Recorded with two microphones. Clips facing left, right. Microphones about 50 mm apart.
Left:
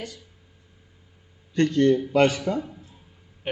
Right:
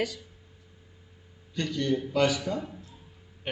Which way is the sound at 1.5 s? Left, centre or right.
Left.